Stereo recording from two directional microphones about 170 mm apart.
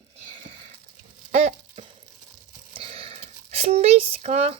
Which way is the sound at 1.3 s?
40° right (ahead or behind).